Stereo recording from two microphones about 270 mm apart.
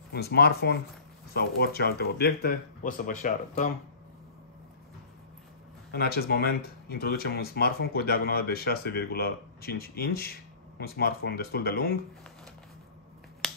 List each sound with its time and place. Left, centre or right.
0.1 s speech: left
5.9 s speech: left